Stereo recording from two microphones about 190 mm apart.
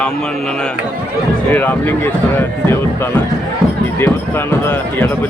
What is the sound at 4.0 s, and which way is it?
Speech, 10° left (ahead or behind).